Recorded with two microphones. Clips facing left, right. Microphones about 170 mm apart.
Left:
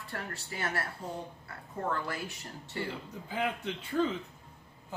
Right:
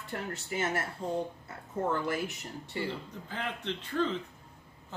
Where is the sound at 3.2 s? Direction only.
10° left (ahead or behind).